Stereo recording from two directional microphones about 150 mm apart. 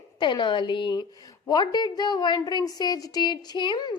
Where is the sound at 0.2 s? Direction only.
30° left (ahead or behind).